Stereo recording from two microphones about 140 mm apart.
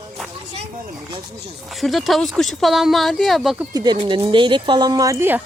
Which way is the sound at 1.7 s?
Centre (ahead or behind).